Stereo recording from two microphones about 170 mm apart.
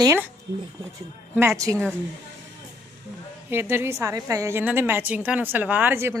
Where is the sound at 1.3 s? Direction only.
5° right (ahead or behind).